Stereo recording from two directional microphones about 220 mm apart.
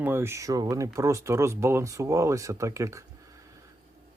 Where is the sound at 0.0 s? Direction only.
10° right (ahead or behind).